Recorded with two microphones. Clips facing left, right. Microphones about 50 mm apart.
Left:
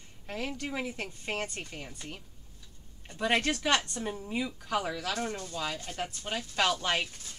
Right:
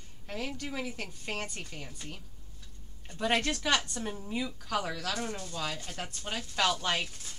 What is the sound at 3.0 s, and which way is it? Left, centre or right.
Speech, centre.